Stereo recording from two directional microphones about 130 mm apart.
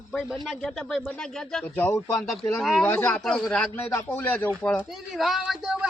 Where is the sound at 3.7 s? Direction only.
20° left (ahead or behind).